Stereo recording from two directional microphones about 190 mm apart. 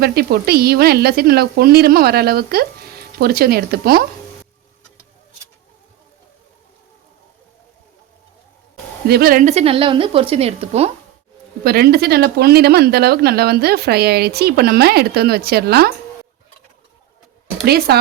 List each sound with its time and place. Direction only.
0.0 s speech: 55° right (ahead or behind)
9.0 s speech: 55° right (ahead or behind); by 10.9 s 30° right (ahead or behind)
11.6 s speech: 55° right (ahead or behind)
17.7 s speech: 55° right (ahead or behind)